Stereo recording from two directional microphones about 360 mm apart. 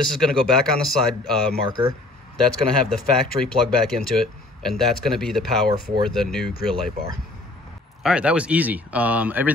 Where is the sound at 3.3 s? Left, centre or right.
Centre.